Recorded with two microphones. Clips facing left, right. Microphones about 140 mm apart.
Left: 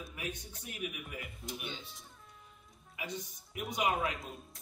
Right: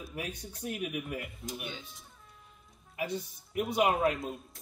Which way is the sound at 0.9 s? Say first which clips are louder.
Right 8 dB; 45° right (ahead or behind).